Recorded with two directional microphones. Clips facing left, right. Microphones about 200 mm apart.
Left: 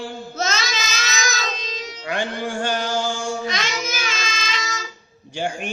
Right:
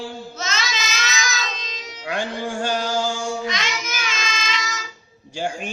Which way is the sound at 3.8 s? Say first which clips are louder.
Left 2 dB; 35° left (ahead or behind).